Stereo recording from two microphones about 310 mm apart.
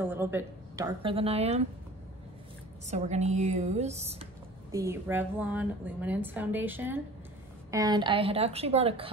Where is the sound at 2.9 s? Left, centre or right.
Right.